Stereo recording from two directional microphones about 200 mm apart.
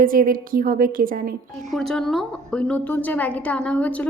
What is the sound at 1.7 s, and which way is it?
A woman's voice, centre (ahead or behind).